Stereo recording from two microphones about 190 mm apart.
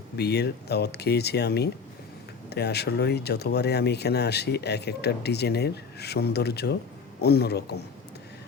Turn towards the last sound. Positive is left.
turn(degrees=60)  # may be behind; listen again after turning